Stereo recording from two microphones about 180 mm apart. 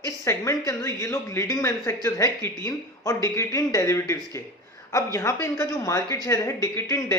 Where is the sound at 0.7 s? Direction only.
20° left (ahead or behind).